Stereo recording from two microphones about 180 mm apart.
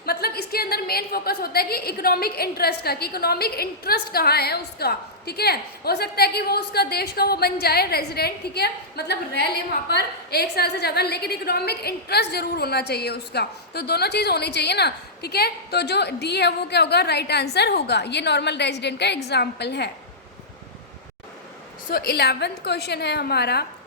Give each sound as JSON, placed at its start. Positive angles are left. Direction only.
{"t": 0.0, "sound": "a woman's voice", "side_deg": 60}
{"t": 21.8, "sound": "a woman's voice", "side_deg": 55}